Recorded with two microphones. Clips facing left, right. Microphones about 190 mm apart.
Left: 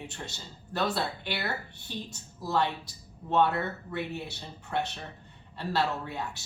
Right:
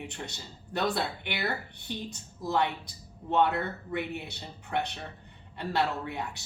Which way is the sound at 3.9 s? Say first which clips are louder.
Right 1 dB; 15° right (ahead or behind).